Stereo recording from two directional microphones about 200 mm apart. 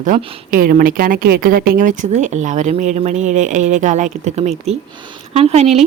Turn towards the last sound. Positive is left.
turn(degrees=-35)  # may be behind; listen again after turning